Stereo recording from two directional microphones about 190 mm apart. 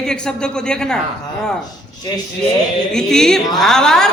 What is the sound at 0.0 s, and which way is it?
Speech, 5° left (ahead or behind).